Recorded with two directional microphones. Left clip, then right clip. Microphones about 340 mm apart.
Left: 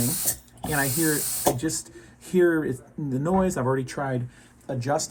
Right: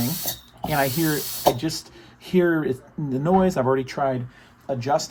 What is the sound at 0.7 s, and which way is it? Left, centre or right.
Speech, right.